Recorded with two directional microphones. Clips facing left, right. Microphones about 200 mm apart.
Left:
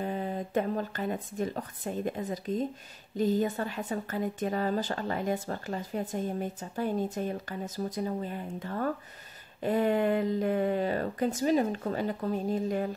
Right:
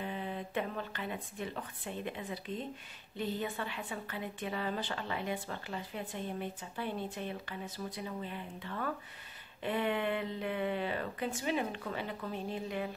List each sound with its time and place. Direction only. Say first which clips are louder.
0.0 s a woman's voice: left 6 dB; 40° left (ahead or behind)